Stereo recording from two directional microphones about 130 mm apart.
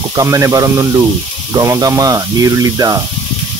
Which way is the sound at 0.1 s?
25° right (ahead or behind).